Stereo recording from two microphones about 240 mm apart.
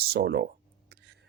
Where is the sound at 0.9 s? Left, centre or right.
Right.